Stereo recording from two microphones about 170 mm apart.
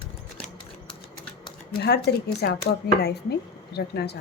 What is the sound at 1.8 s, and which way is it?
Speech, 70° left (ahead or behind).